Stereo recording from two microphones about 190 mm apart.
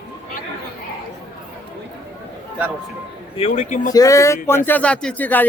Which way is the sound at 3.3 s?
35° left (ahead or behind).